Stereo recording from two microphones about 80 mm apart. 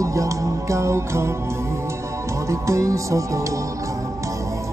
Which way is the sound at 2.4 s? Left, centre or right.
Right.